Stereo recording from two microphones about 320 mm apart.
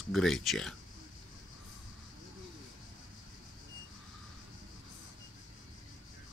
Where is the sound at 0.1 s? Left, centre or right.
Centre.